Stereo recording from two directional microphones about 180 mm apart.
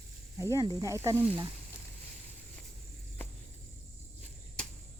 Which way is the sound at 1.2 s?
30° right (ahead or behind).